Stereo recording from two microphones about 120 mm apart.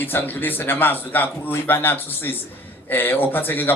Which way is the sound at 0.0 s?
15° left (ahead or behind).